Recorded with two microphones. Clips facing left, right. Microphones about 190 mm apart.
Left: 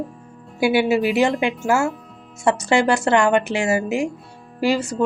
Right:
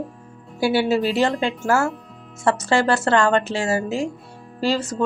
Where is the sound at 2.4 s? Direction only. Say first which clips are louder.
Left 1 dB; 15° left (ahead or behind).